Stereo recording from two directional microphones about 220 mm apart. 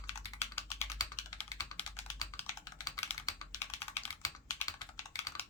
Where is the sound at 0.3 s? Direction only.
10° left (ahead or behind).